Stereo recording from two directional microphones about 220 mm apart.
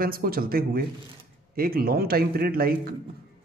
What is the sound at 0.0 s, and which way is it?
A man's voice, 40° right (ahead or behind).